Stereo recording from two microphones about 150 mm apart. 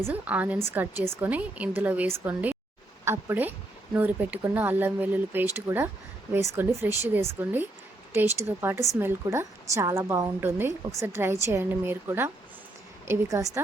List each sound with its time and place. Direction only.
0.0 s a woman's voice: 10° right (ahead or behind)